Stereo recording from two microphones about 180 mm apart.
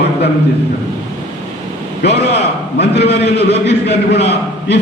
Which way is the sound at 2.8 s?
70° left (ahead or behind).